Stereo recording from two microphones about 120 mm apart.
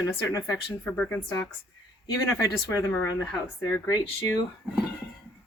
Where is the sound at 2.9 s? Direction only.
10° left (ahead or behind).